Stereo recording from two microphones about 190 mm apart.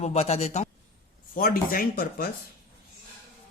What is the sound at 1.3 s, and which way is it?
Speech, 50° left (ahead or behind).